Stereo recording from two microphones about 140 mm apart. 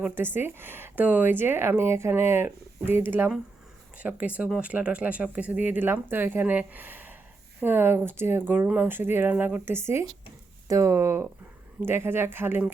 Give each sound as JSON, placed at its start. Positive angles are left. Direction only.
{"t": 0.0, "sound": "speech", "side_deg": -15}